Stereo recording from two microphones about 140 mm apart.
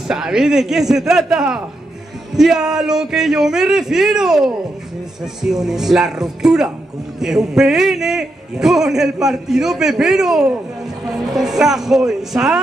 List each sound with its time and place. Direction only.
0.1 s a man's voice: 5° right (ahead or behind)